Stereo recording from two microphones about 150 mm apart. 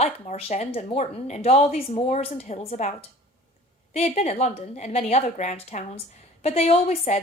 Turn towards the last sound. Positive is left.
turn(degrees=45)  # may be behind; listen again after turning